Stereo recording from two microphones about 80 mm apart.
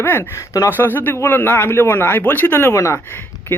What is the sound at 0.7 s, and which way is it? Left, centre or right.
A man's voice, left.